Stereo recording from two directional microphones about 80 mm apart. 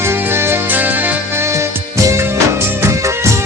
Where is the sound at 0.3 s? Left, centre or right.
Right.